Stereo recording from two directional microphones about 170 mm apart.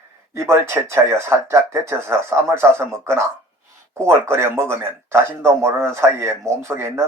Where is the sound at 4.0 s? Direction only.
15° right (ahead or behind).